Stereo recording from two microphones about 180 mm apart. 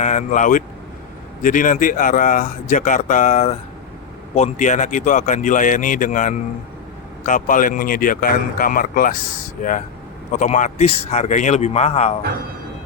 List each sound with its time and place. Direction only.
0.0 s a man's voice: 40° left (ahead or behind)